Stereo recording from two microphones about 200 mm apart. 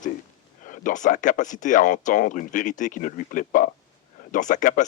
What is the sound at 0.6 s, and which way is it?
Speech, 40° left (ahead or behind).